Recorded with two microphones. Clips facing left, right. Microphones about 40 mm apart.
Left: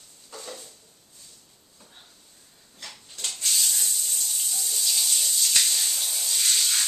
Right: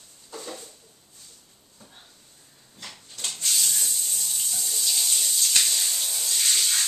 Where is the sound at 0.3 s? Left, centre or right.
Centre.